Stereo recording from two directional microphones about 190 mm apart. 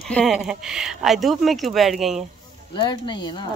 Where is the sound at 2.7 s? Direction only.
25° left (ahead or behind).